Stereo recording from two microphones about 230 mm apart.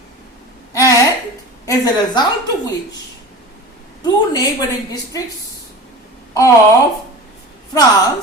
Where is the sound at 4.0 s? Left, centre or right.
Centre.